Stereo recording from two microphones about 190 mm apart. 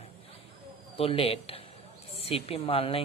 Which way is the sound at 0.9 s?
30° left (ahead or behind).